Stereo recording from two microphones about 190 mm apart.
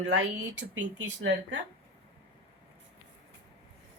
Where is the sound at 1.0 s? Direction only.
70° right (ahead or behind).